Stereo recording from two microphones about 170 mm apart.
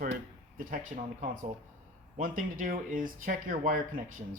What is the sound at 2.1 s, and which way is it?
Speech, 50° right (ahead or behind).